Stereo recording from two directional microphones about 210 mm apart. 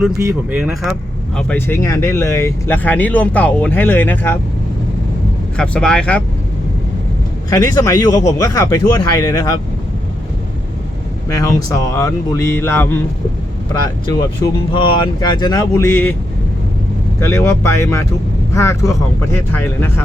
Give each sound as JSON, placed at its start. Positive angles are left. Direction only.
{"t": 0.2, "sound": "speech", "side_deg": -10}
{"t": 1.4, "sound": "speech", "side_deg": 10}
{"t": 5.5, "sound": "speech", "side_deg": 5}
{"t": 7.5, "sound": "speech", "side_deg": 15}
{"t": 11.3, "sound": "speech", "side_deg": 15}
{"t": 14.7, "sound": "speech", "side_deg": 20}
{"t": 17.2, "sound": "speech", "side_deg": 15}